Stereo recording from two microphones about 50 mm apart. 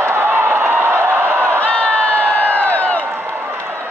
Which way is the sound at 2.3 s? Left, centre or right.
Left.